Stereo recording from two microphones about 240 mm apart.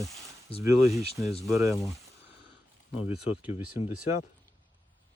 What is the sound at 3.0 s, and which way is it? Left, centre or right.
Speech, centre.